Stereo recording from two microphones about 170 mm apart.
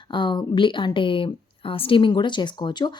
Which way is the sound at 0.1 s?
25° left (ahead or behind).